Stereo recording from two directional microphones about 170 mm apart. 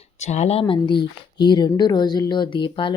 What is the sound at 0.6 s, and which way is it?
A woman's voice, 30° left (ahead or behind).